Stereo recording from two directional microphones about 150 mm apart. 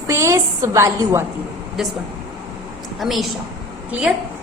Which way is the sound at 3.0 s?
Centre (ahead or behind).